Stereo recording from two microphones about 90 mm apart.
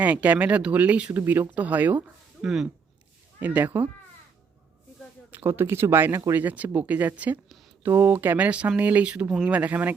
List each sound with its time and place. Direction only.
0.0 s speech: 15° right (ahead or behind)
2.4 s speech: 5° right (ahead or behind)
3.4 s speech: 20° right (ahead or behind)
5.3 s speech: 25° right (ahead or behind)